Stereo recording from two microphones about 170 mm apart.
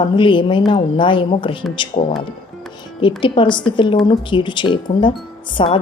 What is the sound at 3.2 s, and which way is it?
Speech, 30° left (ahead or behind).